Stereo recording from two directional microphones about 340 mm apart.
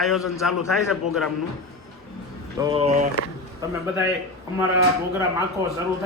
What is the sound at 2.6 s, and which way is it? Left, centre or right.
Speech, centre.